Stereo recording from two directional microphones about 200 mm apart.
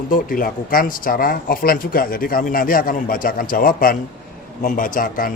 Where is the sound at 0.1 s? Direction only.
45° left (ahead or behind).